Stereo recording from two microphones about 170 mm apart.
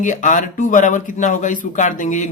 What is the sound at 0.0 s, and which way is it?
Speech, 50° left (ahead or behind).